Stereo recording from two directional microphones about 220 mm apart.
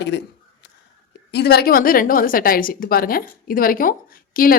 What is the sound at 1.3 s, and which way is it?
A woman's voice, 45° left (ahead or behind).